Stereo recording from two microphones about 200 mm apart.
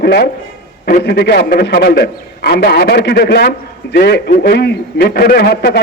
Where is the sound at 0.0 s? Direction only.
55° left (ahead or behind).